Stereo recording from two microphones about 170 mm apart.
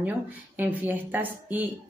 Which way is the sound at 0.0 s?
10° right (ahead or behind).